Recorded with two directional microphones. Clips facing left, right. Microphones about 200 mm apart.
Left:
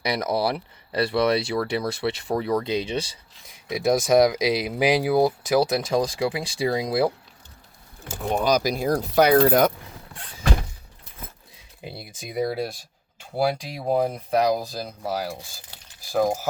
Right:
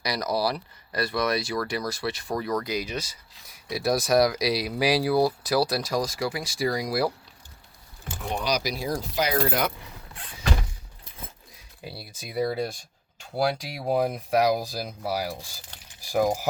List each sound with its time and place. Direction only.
0.0 s speech: 25° left (ahead or behind)
8.0 s speech: 45° left (ahead or behind)
11.8 s speech: 20° left (ahead or behind)
12.4 s speech: centre (ahead or behind)
15.7 s keys jangling: 10° left (ahead or behind)
16.1 s speech: 10° right (ahead or behind)